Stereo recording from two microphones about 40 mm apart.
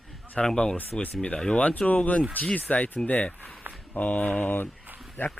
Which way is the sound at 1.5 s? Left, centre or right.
Left.